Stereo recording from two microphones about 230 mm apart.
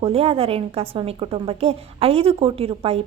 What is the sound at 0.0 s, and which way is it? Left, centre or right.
A woman's voice, right.